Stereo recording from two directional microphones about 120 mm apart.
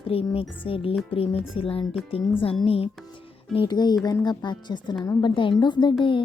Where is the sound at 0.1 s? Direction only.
50° left (ahead or behind).